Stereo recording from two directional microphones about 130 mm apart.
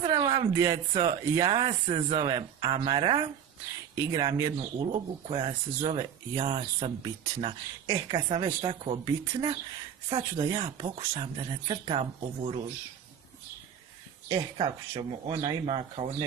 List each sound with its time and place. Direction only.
0.0 s a sound: 40° right (ahead or behind)
0.9 s speech: 30° right (ahead or behind)
4.8 s speech: 45° right (ahead or behind)
10.8 s speech: 50° right (ahead or behind)
14.3 s speech: 30° right (ahead or behind)